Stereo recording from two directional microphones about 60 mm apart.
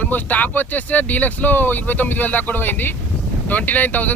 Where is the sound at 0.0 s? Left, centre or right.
Left.